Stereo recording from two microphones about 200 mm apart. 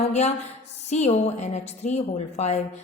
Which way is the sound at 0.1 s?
35° left (ahead or behind).